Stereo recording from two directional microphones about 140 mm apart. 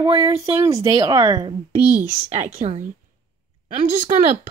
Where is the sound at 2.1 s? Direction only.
55° right (ahead or behind).